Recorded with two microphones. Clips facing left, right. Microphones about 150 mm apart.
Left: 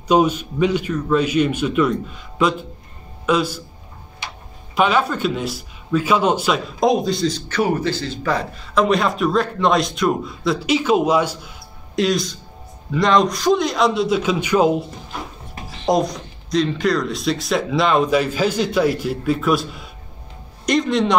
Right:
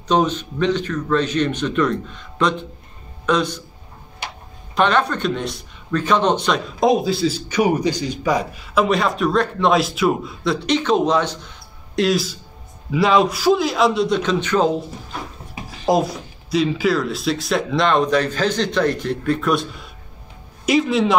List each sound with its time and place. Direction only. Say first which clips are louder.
0.1 s a man's voice: left 2 dB; 10° left (ahead or behind)
4.7 s speech: even; 5° left (ahead or behind)
15.5 s speech: even; 5° right (ahead or behind)